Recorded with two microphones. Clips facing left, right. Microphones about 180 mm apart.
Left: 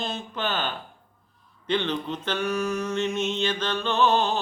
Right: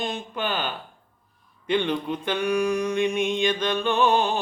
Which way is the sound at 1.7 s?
10° right (ahead or behind).